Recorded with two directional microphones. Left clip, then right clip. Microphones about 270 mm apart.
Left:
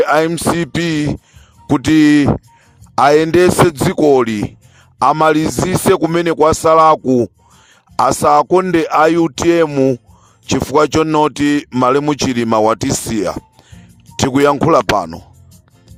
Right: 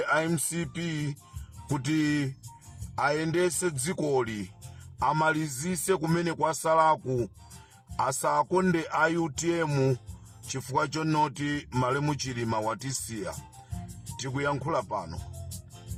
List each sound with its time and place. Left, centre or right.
0.0 s speech: left